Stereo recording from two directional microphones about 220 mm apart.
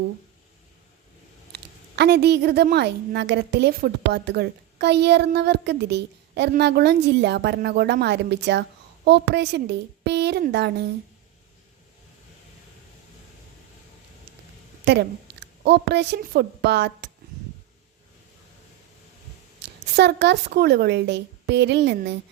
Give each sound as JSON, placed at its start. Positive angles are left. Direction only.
{"t": 1.5, "sound": "a woman's voice", "side_deg": -50}
{"t": 14.8, "sound": "a woman's voice", "side_deg": -50}
{"t": 19.6, "sound": "a woman's voice", "side_deg": -50}